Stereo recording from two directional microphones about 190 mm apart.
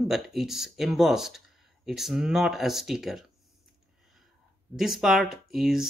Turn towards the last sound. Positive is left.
turn(degrees=0)  # may be behind; listen again after turning